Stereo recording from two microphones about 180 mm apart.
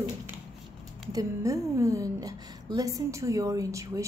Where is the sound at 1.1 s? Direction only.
20° right (ahead or behind).